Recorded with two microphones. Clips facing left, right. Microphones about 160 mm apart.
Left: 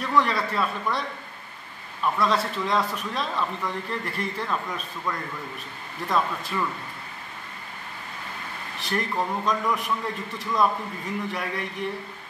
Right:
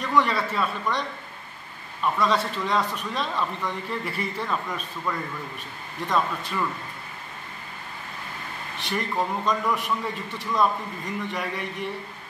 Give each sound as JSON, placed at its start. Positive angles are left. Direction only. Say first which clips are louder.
{"t": 0.0, "sound": "a man's voice", "louder": "even", "side_deg": 0}
{"t": 2.1, "sound": "a man's voice", "louder": "even", "side_deg": 0}
{"t": 8.7, "sound": "a man's voice", "louder": "even", "side_deg": 0}